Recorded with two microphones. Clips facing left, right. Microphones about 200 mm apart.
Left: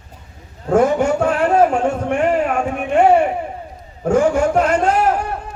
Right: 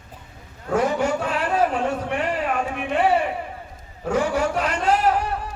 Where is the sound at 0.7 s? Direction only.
50° left (ahead or behind).